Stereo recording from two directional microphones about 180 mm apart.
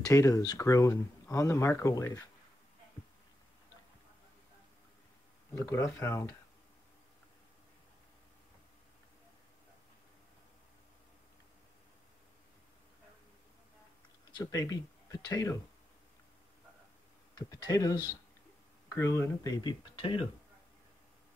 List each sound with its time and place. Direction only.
0.1 s speech: 20° left (ahead or behind)
5.5 s speech: 15° left (ahead or behind)
14.3 s speech: 20° left (ahead or behind)
17.4 s speech: 20° left (ahead or behind)